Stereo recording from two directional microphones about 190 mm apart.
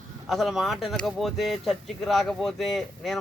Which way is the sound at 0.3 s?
Centre (ahead or behind).